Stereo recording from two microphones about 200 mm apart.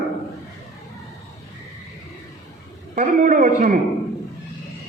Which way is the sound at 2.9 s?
40° right (ahead or behind).